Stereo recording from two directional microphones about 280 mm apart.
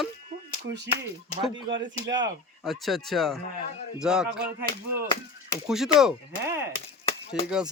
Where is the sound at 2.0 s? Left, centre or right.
Right.